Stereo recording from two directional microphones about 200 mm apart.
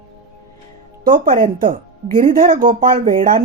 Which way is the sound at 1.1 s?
45° right (ahead or behind).